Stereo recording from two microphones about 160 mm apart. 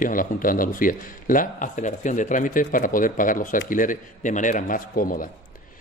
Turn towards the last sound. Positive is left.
turn(degrees=60)  # may be behind; listen again after turning